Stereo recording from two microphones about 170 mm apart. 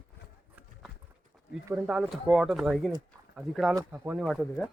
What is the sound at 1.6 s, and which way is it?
Speech, 5° right (ahead or behind).